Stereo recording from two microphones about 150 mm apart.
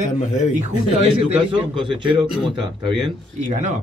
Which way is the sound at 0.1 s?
50° left (ahead or behind).